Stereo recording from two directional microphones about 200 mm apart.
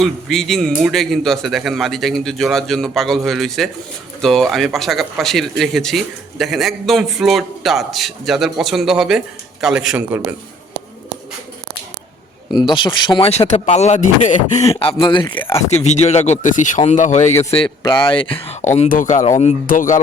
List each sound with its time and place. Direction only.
0.0 s speech: centre (ahead or behind)
12.5 s speech: 20° left (ahead or behind)
15.7 s speech: 35° left (ahead or behind)
17.5 s speech: 25° left (ahead or behind); by 20.0 s 40° left (ahead or behind)